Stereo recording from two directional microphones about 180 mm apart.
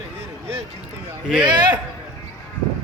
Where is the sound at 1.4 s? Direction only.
25° right (ahead or behind).